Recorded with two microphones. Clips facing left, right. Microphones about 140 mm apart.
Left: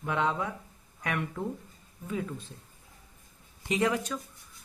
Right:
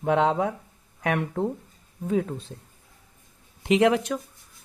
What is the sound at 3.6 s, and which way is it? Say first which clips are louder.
Speech: right 8 dB; 80° right.